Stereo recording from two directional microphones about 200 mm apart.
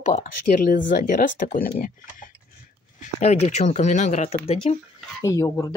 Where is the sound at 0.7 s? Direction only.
40° left (ahead or behind).